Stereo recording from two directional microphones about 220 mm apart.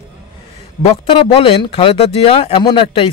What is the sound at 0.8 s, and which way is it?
Speech, 25° left (ahead or behind).